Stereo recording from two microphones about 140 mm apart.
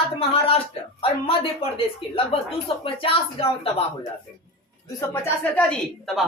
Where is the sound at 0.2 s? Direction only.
45° left (ahead or behind).